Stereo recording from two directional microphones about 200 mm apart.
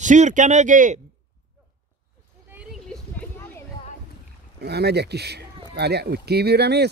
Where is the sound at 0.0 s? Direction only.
40° right (ahead or behind).